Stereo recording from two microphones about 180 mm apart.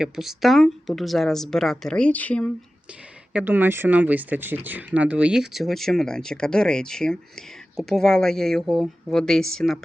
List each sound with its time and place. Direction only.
0.0 s speech: centre (ahead or behind)
3.3 s speech: 10° right (ahead or behind)